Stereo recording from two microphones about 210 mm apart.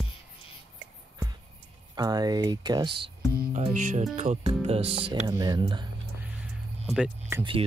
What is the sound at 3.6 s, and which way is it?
Speech, 35° right (ahead or behind).